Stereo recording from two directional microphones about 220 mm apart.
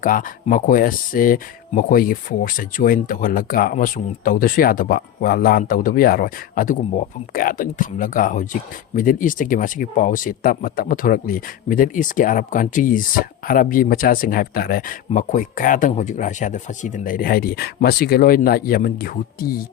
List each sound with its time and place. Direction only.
0.0 s speech: 40° left (ahead or behind)